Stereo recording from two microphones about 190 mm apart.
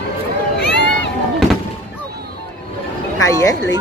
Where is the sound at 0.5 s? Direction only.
65° left (ahead or behind).